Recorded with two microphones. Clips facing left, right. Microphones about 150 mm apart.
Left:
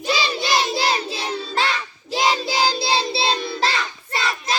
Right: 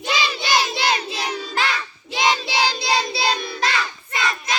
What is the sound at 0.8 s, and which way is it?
Child singing, 35° left (ahead or behind).